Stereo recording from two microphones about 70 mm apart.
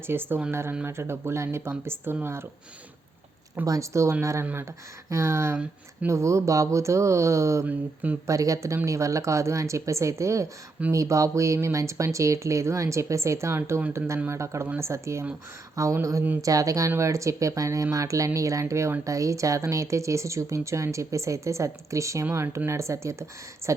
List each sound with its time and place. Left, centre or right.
0.1 s speech: right
3.7 s speech: right
7.7 s mantra: right
8.3 s speech: right